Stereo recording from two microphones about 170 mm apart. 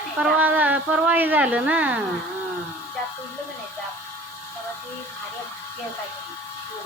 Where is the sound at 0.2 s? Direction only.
10° right (ahead or behind).